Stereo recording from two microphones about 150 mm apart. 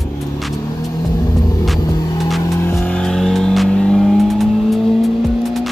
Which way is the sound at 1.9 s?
25° left (ahead or behind).